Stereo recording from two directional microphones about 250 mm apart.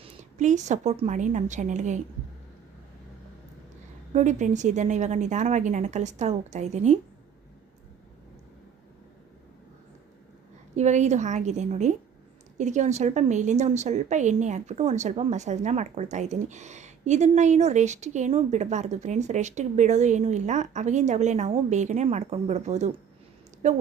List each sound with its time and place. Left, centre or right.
0.0 s a woman's voice: right
4.1 s a woman's voice: right
10.8 s a woman's voice: right